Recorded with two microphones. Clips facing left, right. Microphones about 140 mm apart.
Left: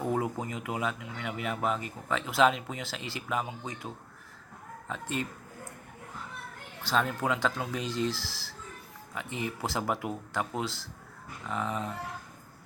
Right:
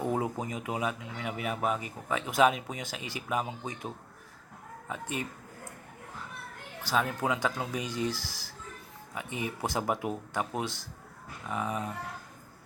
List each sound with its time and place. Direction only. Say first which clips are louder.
0.0 s speech: even; 15° right (ahead or behind)
6.8 s speech: left 1 dB; 10° right (ahead or behind)